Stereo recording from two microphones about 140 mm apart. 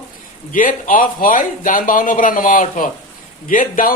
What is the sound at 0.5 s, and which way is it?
Speech, 75° left (ahead or behind).